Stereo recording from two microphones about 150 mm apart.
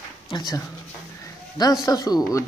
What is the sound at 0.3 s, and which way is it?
Speech, 25° left (ahead or behind).